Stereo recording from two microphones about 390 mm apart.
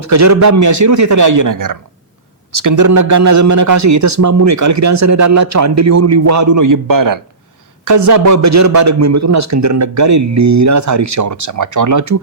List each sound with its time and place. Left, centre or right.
0.0 s a man's voice: right